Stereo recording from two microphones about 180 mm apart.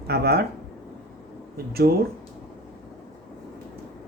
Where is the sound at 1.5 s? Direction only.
55° right (ahead or behind).